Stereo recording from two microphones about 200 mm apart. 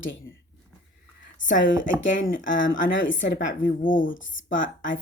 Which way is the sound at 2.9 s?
70° left (ahead or behind).